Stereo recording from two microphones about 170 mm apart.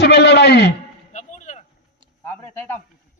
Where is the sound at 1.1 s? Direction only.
45° left (ahead or behind).